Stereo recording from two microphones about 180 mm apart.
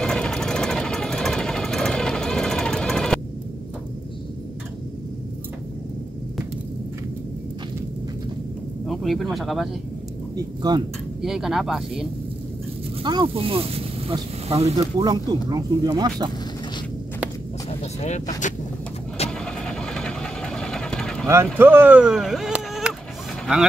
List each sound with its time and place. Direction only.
0.0 s vehicle: 5° left (ahead or behind)
8.8 s speech: centre (ahead or behind)
10.3 s speech: 20° right (ahead or behind)
11.1 s speech: centre (ahead or behind)
13.0 s speech: 25° right (ahead or behind)
18.0 s speech: 40° left (ahead or behind)
19.4 s vehicle: 5° left (ahead or behind)
21.5 s speech: 10° right (ahead or behind)